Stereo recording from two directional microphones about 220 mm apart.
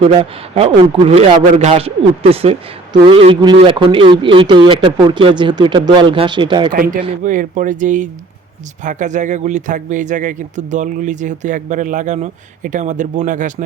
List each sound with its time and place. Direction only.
0.5 s a man's voice: 25° right (ahead or behind)
6.7 s speech: 40° right (ahead or behind)